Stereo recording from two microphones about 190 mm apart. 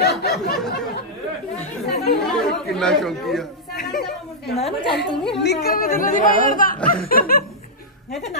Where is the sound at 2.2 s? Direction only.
5° left (ahead or behind).